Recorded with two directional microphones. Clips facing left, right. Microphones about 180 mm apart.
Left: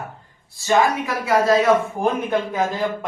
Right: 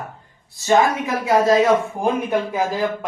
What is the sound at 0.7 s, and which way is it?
Speech, 20° right (ahead or behind).